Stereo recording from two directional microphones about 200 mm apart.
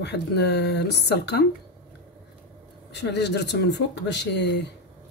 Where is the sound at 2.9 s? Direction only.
60° left (ahead or behind).